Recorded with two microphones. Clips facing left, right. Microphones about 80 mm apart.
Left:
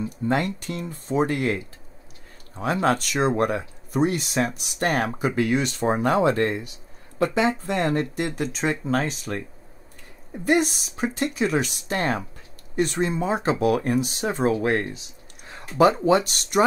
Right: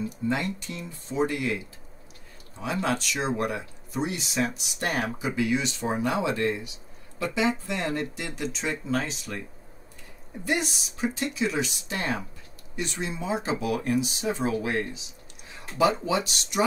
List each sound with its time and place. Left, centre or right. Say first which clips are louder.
0.3 s speech: left 6 dB; left
2.6 s speech: left 6 dB; left
10.4 s speech: left 7 dB; left